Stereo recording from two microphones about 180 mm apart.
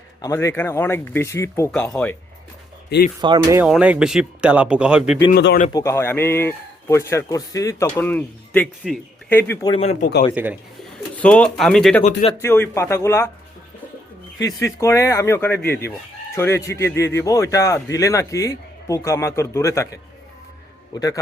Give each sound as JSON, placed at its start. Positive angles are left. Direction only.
{"t": 0.2, "sound": "a man's voice", "side_deg": 15}
{"t": 3.2, "sound": "speech", "side_deg": -25}
{"t": 3.6, "sound": "speech", "side_deg": -5}
{"t": 5.3, "sound": "speech", "side_deg": 70}
{"t": 5.7, "sound": "a man's voice", "side_deg": 15}
{"t": 9.7, "sound": "speech", "side_deg": 35}
{"t": 10.0, "sound": "speech", "side_deg": 70}
{"t": 10.3, "sound": "speech", "side_deg": -10}
{"t": 11.2, "sound": "speech", "side_deg": 5}
{"t": 12.4, "sound": "a man's voice", "side_deg": 15}
{"t": 14.4, "sound": "a man's voice", "side_deg": 15}
{"t": 20.9, "sound": "a man's voice", "side_deg": 25}